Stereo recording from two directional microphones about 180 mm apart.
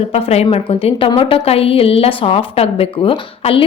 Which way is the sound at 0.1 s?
35° left (ahead or behind).